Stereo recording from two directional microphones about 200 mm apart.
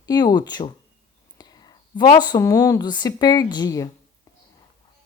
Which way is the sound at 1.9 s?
20° left (ahead or behind).